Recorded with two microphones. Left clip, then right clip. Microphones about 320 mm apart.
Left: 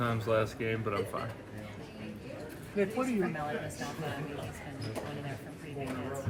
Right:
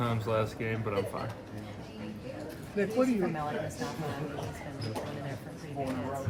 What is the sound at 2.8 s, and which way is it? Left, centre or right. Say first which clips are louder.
Speech: even; left.